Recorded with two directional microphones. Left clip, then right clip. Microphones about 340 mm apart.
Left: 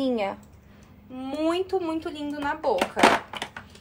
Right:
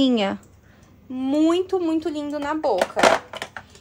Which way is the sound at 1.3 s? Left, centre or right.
Right.